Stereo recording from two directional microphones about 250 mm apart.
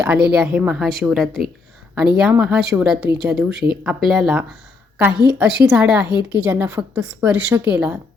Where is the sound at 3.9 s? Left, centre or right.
Centre.